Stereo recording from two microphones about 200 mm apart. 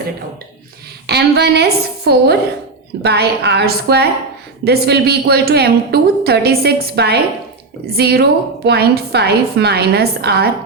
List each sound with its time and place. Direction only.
1.0 s a woman's voice: 55° right (ahead or behind)